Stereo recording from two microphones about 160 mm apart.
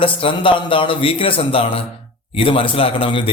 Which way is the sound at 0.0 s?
35° left (ahead or behind).